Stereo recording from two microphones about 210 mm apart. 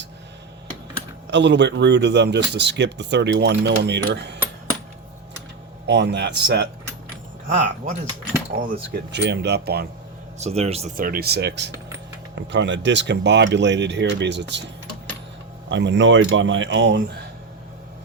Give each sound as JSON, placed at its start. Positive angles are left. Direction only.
{"t": 1.3, "sound": "speech", "side_deg": -60}
{"t": 5.8, "sound": "speech", "side_deg": -55}
{"t": 7.4, "sound": "speech", "side_deg": -35}
{"t": 10.4, "sound": "speech", "side_deg": -30}
{"t": 15.7, "sound": "speech", "side_deg": -60}